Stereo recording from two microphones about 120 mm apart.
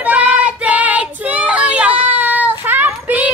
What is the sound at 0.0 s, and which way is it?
Child singing, 10° right (ahead or behind).